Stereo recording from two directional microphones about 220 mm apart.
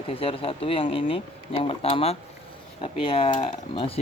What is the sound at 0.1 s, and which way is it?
Speech, 25° left (ahead or behind).